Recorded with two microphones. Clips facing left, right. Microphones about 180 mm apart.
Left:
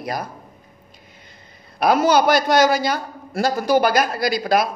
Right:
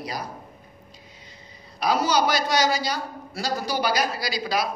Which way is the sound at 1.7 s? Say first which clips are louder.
Left 6 dB; 55° left (ahead or behind).